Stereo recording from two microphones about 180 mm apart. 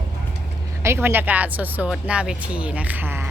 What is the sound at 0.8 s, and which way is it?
Speech, 15° right (ahead or behind).